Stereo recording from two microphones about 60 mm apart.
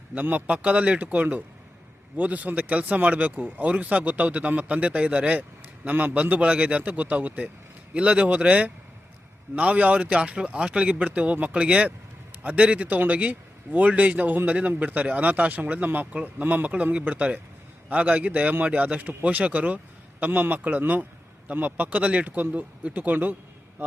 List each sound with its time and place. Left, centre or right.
0.1 s a man's voice: right